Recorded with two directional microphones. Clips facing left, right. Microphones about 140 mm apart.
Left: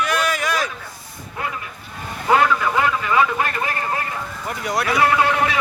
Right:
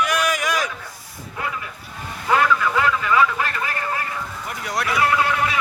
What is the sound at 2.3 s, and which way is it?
Vehicle, 25° left (ahead or behind).